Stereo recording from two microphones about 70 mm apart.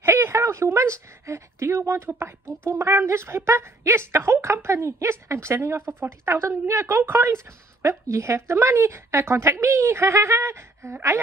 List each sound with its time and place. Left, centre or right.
0.0 s a woman's voice: right